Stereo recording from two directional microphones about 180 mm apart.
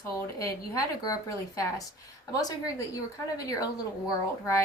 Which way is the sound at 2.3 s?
20° left (ahead or behind).